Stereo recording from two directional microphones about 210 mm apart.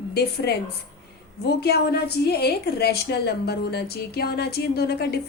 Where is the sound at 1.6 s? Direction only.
50° left (ahead or behind).